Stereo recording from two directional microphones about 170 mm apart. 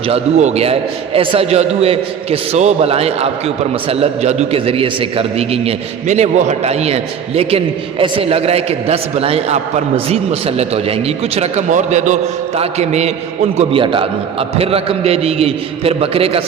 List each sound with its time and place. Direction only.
0.1 s a man's voice: 40° right (ahead or behind)